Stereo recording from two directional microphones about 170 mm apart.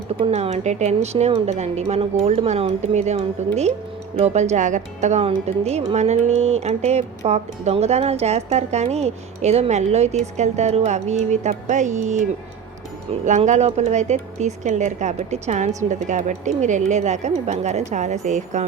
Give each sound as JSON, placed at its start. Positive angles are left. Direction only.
{"t": 0.1, "sound": "speech", "side_deg": -40}
{"t": 13.2, "sound": "speech", "side_deg": -45}